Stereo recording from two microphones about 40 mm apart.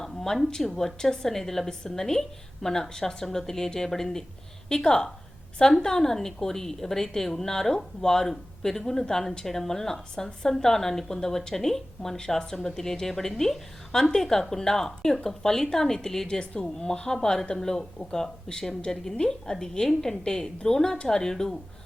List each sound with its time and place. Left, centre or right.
0.0 s a woman's voice: centre
16.4 s a woman's voice: left